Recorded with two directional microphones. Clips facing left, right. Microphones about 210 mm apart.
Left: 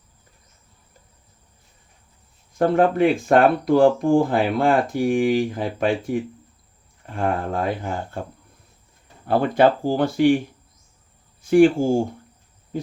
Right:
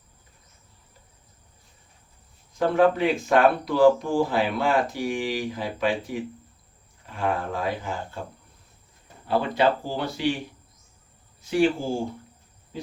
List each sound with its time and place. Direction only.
2.6 s speech: 50° left (ahead or behind)
9.2 s speech: 50° left (ahead or behind)
11.4 s speech: 50° left (ahead or behind)